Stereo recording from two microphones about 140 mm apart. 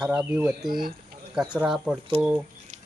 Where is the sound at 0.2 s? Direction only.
10° right (ahead or behind).